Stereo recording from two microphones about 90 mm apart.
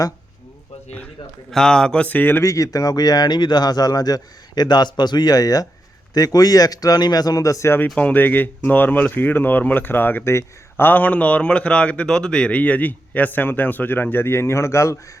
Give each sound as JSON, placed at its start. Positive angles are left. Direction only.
{"t": 1.5, "sound": "speech", "side_deg": 5}
{"t": 2.4, "sound": "a man's voice", "side_deg": 35}
{"t": 7.9, "sound": "speech", "side_deg": 20}